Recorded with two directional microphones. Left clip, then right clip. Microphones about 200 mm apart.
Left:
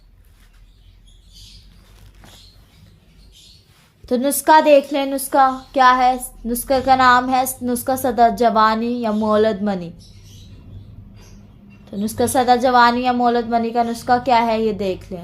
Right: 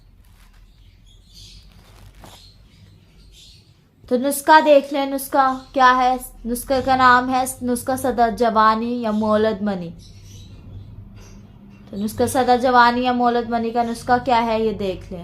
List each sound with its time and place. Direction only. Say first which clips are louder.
4.0 s a woman's voice: left 1 dB; 30° left (ahead or behind)
11.9 s a woman's voice: left 1 dB; 30° left (ahead or behind)